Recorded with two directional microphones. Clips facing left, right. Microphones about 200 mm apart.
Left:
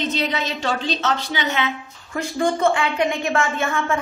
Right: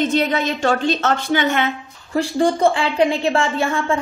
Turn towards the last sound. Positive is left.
turn(degrees=-30)  # may be behind; listen again after turning